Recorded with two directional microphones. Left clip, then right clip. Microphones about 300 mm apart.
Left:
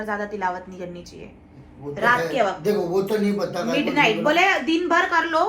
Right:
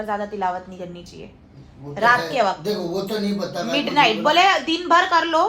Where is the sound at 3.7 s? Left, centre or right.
Right.